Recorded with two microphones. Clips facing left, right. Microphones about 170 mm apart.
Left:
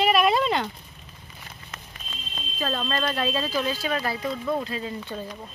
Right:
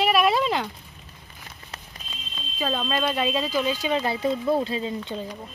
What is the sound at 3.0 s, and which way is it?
Speech, 15° right (ahead or behind).